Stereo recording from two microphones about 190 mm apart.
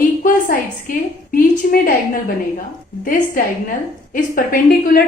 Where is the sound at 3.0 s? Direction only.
45° left (ahead or behind).